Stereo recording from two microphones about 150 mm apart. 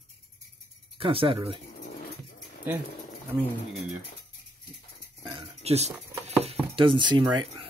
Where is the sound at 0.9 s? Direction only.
35° right (ahead or behind).